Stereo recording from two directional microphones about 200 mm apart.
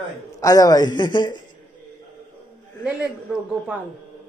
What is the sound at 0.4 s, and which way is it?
A man's voice, 20° left (ahead or behind).